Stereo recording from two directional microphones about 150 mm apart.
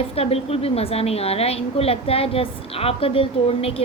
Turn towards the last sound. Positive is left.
turn(degrees=40)  # may be behind; listen again after turning